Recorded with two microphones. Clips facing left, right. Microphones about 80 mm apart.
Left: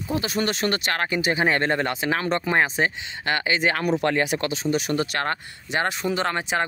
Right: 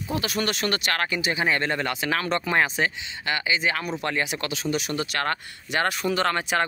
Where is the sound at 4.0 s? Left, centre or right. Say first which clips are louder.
Left 5 dB; left.